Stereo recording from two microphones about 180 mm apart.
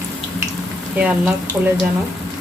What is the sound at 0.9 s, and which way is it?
Speech, 5° right (ahead or behind).